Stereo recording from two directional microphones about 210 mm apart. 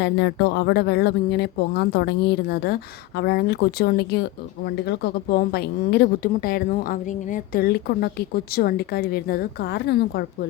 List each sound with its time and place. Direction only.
0.0 s speech: 55° left (ahead or behind)